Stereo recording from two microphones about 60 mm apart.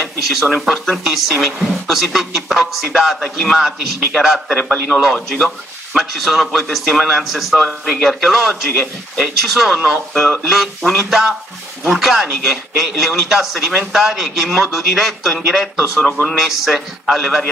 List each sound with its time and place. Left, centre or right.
0.0 s a man's voice: centre
16.0 s speech: centre
16.3 s a man's voice: centre